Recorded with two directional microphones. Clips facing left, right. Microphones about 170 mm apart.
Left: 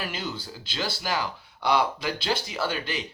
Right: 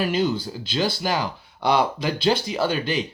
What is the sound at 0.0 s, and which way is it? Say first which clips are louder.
Speech: right 11 dB; 15° right (ahead or behind).